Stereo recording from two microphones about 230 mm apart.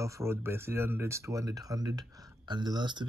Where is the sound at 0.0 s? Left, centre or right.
Centre.